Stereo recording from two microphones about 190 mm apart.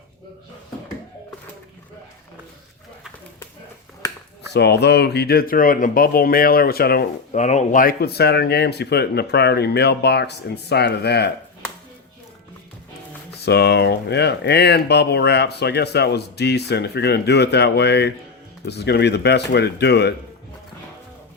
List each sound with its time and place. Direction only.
4.5 s speech: 60° left (ahead or behind)
7.3 s speech: 40° left (ahead or behind); by 11.3 s 60° left (ahead or behind)
13.4 s speech: 60° left (ahead or behind)